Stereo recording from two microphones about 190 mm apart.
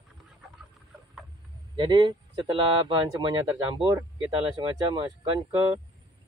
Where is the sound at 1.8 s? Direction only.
25° right (ahead or behind).